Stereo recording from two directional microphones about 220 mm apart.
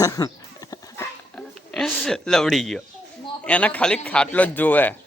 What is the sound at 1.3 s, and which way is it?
A man's voice, 5° left (ahead or behind).